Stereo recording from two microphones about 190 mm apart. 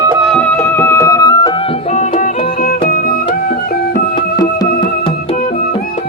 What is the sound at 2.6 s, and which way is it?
Music, 50° left (ahead or behind).